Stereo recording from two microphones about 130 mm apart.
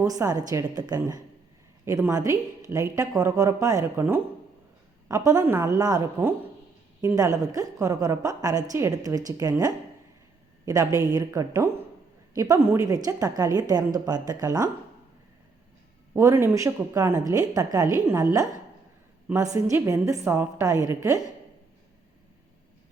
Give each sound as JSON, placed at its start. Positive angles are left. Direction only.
{"t": 0.0, "sound": "a woman's voice", "side_deg": -25}
{"t": 5.0, "sound": "a woman's voice", "side_deg": -25}
{"t": 7.2, "sound": "a woman's voice", "side_deg": -25}
{"t": 16.1, "sound": "a woman's voice", "side_deg": -20}
{"t": 19.3, "sound": "a woman's voice", "side_deg": -20}